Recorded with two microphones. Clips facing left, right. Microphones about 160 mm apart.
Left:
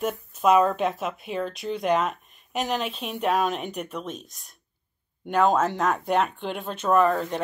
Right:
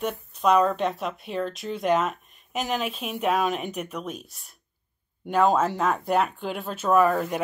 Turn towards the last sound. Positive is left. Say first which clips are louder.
# even
turn(degrees=-10)  # may be behind; listen again after turning